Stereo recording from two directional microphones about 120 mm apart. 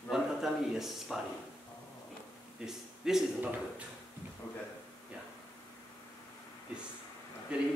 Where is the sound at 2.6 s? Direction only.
5° right (ahead or behind).